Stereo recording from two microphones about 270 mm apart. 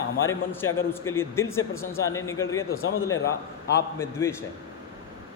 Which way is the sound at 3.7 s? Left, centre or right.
Centre.